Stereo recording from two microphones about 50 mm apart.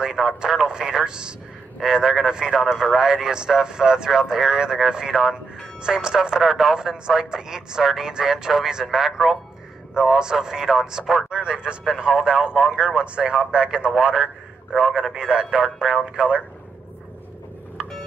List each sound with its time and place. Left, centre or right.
0.0 s speech: centre
6.4 s speech: centre
10.1 s speech: centre
14.1 s a man's voice: centre
17.8 s a sound: centre